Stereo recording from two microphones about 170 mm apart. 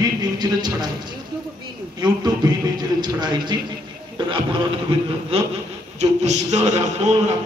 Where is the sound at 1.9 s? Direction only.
25° right (ahead or behind).